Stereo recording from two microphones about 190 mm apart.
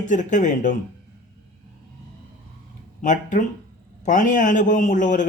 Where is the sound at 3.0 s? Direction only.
40° left (ahead or behind).